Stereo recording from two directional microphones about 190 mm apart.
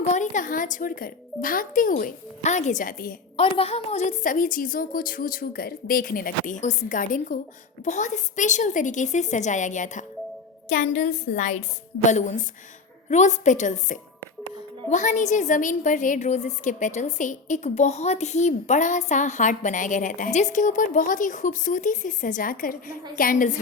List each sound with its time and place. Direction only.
0.1 s a woman's voice: 40° left (ahead or behind)
3.3 s a woman's voice: 30° left (ahead or behind)